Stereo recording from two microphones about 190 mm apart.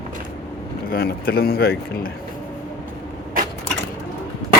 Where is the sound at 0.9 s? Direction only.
50° left (ahead or behind).